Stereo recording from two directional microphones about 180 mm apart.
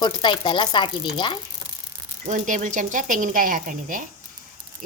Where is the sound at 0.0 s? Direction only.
25° left (ahead or behind).